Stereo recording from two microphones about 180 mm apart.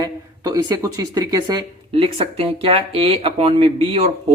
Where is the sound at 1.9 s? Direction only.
30° right (ahead or behind).